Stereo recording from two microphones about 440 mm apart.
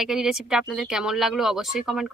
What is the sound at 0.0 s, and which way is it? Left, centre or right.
Speech, centre.